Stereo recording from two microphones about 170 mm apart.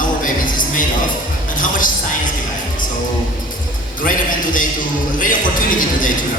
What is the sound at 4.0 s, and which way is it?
Speech, 50° left (ahead or behind).